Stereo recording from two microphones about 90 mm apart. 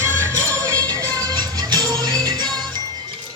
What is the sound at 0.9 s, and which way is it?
Music, 50° right (ahead or behind).